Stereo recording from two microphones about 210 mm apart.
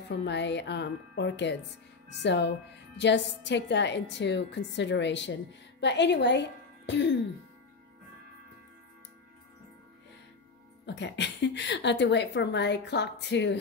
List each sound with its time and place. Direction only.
0.1 s a woman's voice: 55° left (ahead or behind)
10.9 s a woman's voice: 55° left (ahead or behind)